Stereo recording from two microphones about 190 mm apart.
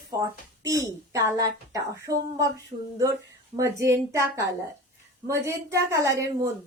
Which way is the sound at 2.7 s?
30° right (ahead or behind).